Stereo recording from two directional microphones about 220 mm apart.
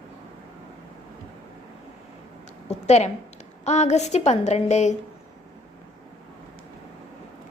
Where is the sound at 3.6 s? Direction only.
30° left (ahead or behind).